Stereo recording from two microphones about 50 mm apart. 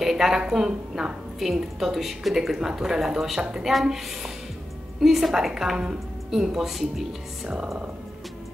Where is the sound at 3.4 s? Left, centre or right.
Centre.